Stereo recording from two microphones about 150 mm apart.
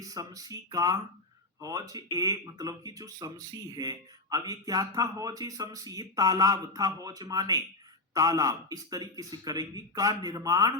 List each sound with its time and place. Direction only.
0.0 s speech: 25° right (ahead or behind)